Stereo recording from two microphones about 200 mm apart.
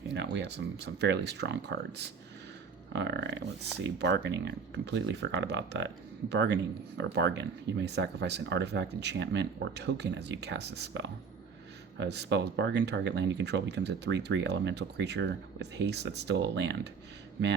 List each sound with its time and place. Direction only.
0.1 s speech: 60° right (ahead or behind)